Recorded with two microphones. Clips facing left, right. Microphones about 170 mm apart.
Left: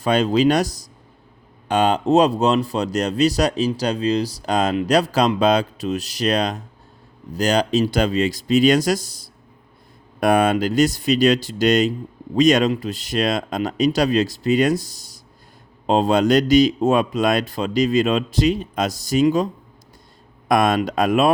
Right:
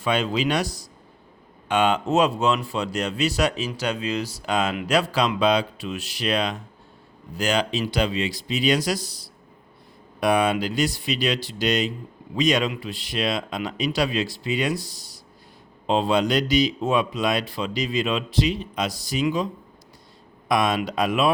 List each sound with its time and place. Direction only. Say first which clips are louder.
0.0 s speech: left 7 dB; 40° left (ahead or behind)
20.5 s speech: left 5 dB; 50° left (ahead or behind)